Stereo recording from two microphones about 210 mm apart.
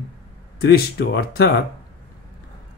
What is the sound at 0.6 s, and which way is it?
Speech, 50° left (ahead or behind).